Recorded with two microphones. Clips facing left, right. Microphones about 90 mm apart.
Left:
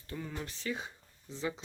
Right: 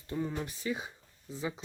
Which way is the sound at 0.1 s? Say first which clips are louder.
Right 6 dB; 20° right (ahead or behind).